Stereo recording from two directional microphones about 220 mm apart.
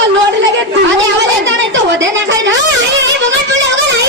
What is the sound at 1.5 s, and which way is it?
A woman's voice, 55° right (ahead or behind).